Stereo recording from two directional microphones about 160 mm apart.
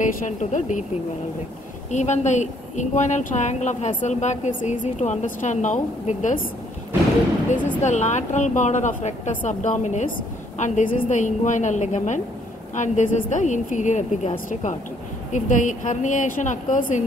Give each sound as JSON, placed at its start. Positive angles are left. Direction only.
{"t": 0.0, "sound": "a woman's voice", "side_deg": 50}
{"t": 1.9, "sound": "a woman's voice", "side_deg": 50}
{"t": 7.8, "sound": "a woman's voice", "side_deg": 45}